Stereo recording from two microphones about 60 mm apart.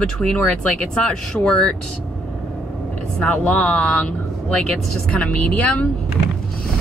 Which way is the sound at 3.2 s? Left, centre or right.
Left.